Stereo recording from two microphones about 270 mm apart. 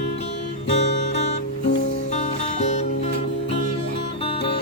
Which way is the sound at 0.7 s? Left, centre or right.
Left.